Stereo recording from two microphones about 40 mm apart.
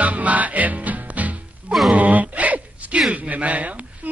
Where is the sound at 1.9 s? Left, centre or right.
Right.